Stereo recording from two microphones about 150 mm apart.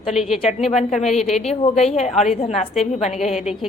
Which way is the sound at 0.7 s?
50° left (ahead or behind).